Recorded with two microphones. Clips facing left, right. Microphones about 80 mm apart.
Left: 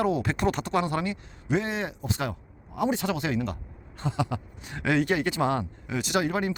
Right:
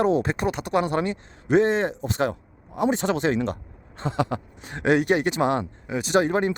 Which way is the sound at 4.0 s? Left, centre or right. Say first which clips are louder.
Right 4 dB; right.